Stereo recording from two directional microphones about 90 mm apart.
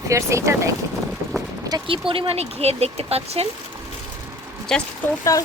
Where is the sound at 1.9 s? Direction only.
85° right.